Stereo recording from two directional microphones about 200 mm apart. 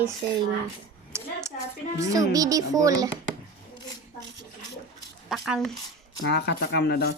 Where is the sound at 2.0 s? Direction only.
15° right (ahead or behind).